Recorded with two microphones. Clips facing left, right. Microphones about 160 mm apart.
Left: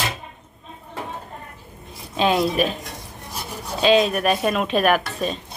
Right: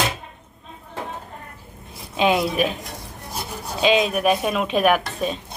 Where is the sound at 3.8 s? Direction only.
10° right (ahead or behind).